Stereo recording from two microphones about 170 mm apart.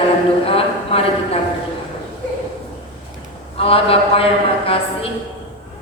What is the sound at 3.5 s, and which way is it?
Speech, 35° left (ahead or behind).